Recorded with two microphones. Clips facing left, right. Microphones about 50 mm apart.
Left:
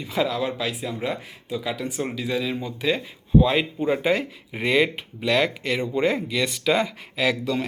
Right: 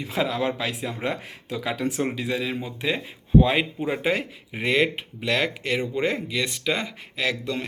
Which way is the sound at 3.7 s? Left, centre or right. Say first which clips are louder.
Left 3 dB; centre.